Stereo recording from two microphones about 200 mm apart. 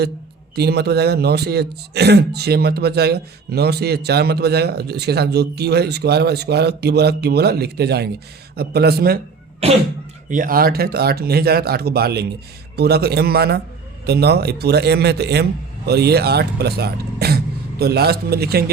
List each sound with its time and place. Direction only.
0.5 s speech: 55° right (ahead or behind)
9.6 s speech: 30° right (ahead or behind)
10.2 s a man's voice: 40° right (ahead or behind)